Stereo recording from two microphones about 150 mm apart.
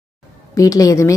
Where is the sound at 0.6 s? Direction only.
20° left (ahead or behind).